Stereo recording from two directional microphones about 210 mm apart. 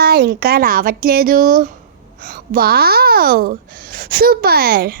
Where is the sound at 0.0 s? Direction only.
50° right (ahead or behind).